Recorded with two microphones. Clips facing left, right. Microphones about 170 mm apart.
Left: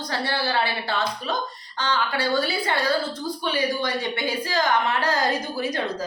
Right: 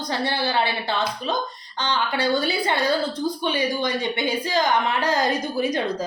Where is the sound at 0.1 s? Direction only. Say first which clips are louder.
Right 2 dB; 20° right (ahead or behind).